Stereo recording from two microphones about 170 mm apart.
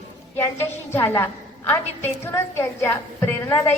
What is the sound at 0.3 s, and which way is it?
A woman's voice, 15° left (ahead or behind).